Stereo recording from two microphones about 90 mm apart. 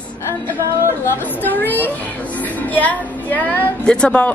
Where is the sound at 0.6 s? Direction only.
25° right (ahead or behind).